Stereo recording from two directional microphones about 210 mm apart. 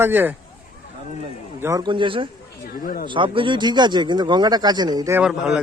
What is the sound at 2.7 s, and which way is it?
Speech, 45° left (ahead or behind).